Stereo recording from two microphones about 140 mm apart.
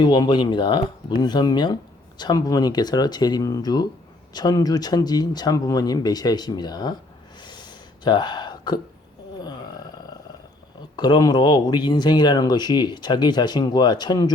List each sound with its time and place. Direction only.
0.0 s speech: 30° left (ahead or behind)
7.4 s a sound: 30° left (ahead or behind)
10.9 s speech: 30° left (ahead or behind)